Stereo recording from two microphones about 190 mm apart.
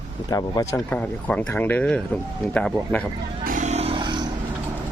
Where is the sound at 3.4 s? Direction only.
40° right (ahead or behind); by 4.3 s 25° right (ahead or behind).